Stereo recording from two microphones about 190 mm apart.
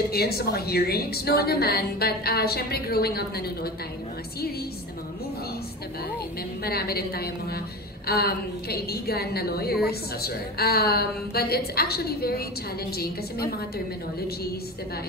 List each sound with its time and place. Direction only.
0.1 s a woman's voice: 55° left (ahead or behind)
6.6 s a woman's voice: 55° left (ahead or behind)